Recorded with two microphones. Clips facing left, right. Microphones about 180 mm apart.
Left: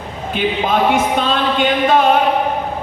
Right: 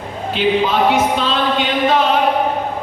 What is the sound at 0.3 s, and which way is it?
Speech, 50° left (ahead or behind).